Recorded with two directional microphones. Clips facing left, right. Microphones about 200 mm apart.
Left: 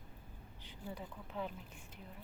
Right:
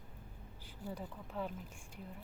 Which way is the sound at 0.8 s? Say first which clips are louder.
Right 2 dB; 5° right (ahead or behind).